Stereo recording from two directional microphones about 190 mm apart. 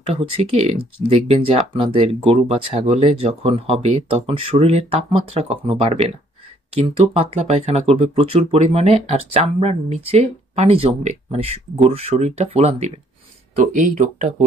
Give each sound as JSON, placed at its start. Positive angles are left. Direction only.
{"t": 0.0, "sound": "speech", "side_deg": -30}